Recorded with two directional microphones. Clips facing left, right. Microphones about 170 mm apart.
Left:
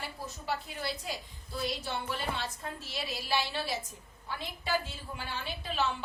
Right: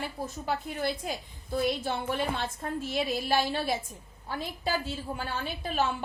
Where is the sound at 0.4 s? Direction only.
50° right (ahead or behind).